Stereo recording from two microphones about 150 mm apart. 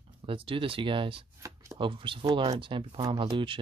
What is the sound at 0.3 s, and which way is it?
Speech, 35° right (ahead or behind).